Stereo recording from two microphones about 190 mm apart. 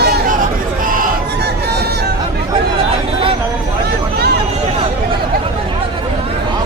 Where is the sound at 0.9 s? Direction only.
55° right (ahead or behind).